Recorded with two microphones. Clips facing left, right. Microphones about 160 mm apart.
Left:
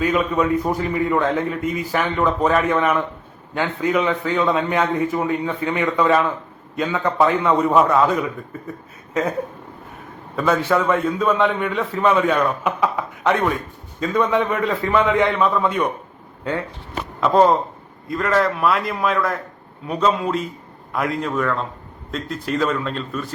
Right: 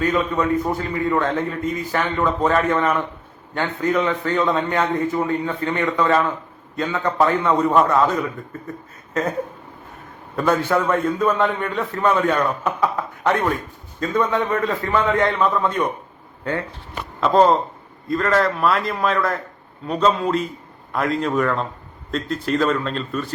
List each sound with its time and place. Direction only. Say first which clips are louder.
0.0 s a man's voice: left 1 dB; 10° left (ahead or behind)
10.3 s a man's voice: even; centre (ahead or behind)
16.4 s speech: even; 20° left (ahead or behind)
17.2 s a man's voice: even; 5° left (ahead or behind)
21.2 s a man's voice: right 2 dB; 5° right (ahead or behind)
22.1 s a man's voice: right 2 dB; 10° left (ahead or behind)